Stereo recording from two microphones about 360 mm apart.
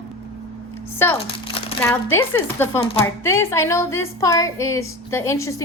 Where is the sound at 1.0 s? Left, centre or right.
Centre.